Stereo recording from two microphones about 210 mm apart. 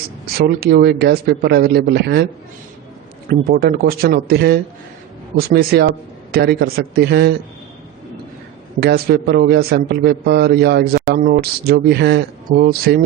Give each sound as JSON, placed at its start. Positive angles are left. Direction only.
{"t": 0.3, "sound": "a man's voice", "side_deg": -45}
{"t": 3.2, "sound": "a man's voice", "side_deg": -45}
{"t": 8.8, "sound": "a man's voice", "side_deg": -50}